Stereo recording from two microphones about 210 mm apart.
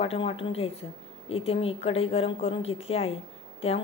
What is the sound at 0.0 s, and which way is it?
A woman's voice, 25° left (ahead or behind).